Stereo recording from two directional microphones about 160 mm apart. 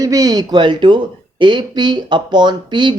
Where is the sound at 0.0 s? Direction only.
20° right (ahead or behind).